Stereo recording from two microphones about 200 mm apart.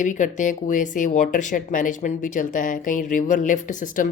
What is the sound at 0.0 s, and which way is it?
Speech, 40° left (ahead or behind).